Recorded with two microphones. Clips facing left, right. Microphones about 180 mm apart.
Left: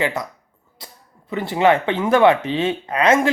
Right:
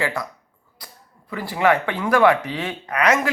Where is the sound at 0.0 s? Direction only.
20° left (ahead or behind).